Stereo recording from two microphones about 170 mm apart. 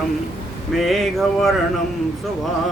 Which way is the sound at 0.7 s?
Centre (ahead or behind).